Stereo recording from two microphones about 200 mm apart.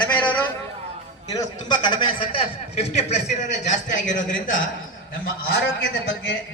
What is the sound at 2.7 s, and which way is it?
A man's voice, 35° left (ahead or behind).